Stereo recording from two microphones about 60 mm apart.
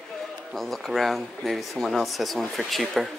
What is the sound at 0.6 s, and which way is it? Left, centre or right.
Speech, centre.